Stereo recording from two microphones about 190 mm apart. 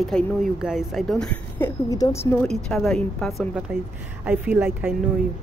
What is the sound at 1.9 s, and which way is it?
Speech, 15° left (ahead or behind).